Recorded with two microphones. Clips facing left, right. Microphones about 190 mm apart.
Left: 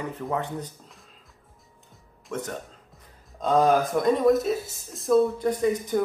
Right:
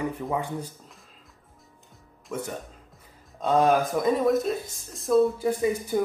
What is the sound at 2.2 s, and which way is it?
Speech, 10° right (ahead or behind).